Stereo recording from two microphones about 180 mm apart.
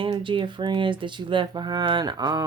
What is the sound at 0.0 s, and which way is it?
Speech, 30° right (ahead or behind).